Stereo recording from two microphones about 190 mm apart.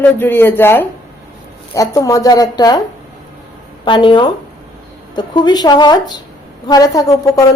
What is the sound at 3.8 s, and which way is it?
A woman's voice, 25° left (ahead or behind).